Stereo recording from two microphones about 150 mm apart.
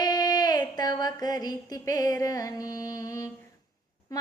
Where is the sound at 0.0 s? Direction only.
25° left (ahead or behind).